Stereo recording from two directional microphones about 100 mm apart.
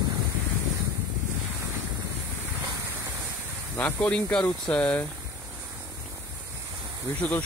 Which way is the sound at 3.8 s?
15° left (ahead or behind).